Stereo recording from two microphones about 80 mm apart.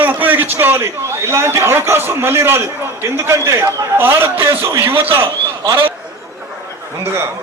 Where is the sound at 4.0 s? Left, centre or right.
Right.